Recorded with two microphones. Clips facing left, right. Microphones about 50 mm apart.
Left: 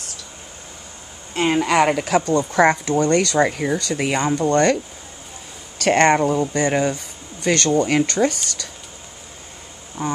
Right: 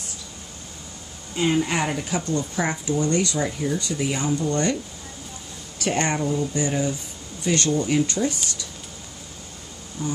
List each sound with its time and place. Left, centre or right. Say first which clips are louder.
1.3 s a woman's voice: left 4 dB; left
5.8 s a woman's voice: left 9 dB; left
10.0 s insect: left 4 dB; left